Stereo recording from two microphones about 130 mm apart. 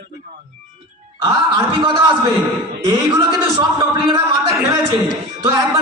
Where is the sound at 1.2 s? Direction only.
35° right (ahead or behind).